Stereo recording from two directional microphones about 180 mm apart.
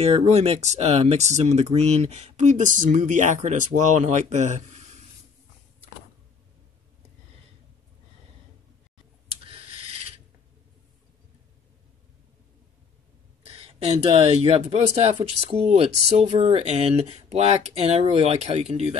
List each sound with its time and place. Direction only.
0.0 s speech: 35° right (ahead or behind)
9.3 s a sound: 30° right (ahead or behind)
13.4 s speech: 30° right (ahead or behind)